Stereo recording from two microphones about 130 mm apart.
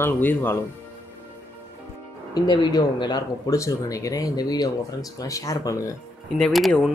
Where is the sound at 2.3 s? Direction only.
35° left (ahead or behind).